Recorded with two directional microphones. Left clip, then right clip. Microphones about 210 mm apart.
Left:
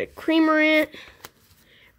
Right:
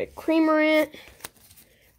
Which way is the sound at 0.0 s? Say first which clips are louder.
Left 1 dB; 15° left (ahead or behind).